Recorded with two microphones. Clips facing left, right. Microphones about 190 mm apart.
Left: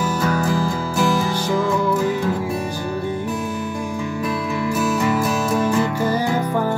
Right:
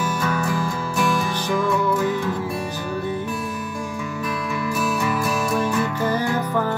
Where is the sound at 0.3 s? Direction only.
35° left (ahead or behind).